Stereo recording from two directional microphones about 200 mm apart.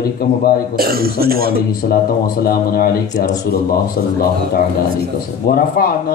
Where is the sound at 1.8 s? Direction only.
50° left (ahead or behind).